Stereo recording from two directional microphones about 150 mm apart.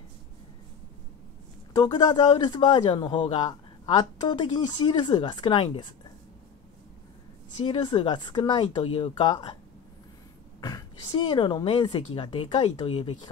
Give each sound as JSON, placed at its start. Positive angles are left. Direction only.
{"t": 1.8, "sound": "a man's voice", "side_deg": 30}
{"t": 7.6, "sound": "a man's voice", "side_deg": 35}
{"t": 10.6, "sound": "a man's voice", "side_deg": 25}